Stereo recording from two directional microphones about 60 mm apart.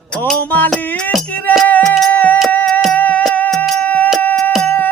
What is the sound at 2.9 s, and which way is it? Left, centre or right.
Music, left.